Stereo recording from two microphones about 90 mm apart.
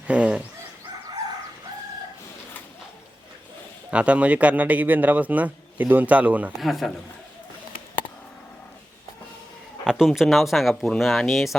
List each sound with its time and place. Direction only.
0.1 s fowl: 15° right (ahead or behind)
3.9 s a man's voice: 15° right (ahead or behind)
6.6 s speech: centre (ahead or behind)
9.8 s speech: 5° right (ahead or behind)